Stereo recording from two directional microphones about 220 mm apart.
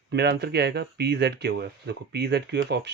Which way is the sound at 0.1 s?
50° right (ahead or behind).